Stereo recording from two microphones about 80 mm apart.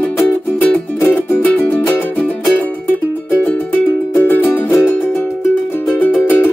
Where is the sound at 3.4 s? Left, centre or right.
Centre.